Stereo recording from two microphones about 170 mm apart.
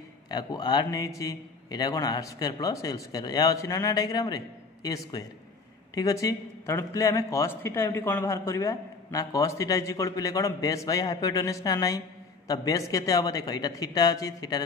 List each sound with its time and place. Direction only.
0.3 s a man's voice: 25° left (ahead or behind)